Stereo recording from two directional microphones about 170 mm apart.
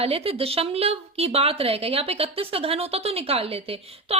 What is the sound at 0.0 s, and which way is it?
A woman's voice, 35° right (ahead or behind).